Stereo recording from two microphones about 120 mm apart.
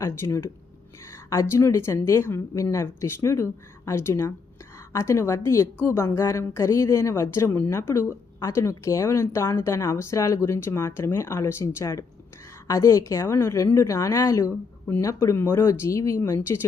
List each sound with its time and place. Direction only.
0.0 s a woman's voice: 25° left (ahead or behind)